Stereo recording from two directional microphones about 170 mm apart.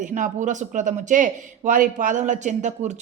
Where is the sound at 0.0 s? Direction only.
45° right (ahead or behind).